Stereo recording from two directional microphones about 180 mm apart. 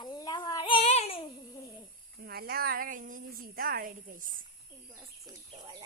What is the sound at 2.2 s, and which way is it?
A woman's voice, 60° right (ahead or behind).